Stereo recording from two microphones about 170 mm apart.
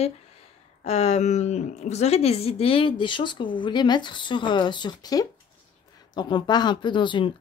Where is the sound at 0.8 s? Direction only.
40° left (ahead or behind).